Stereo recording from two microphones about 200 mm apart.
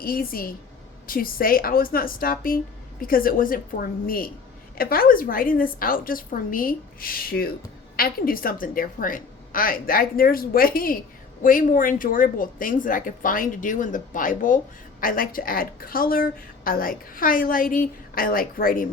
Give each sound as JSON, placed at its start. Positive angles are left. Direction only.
{"t": 0.0, "sound": "a woman's voice", "side_deg": 45}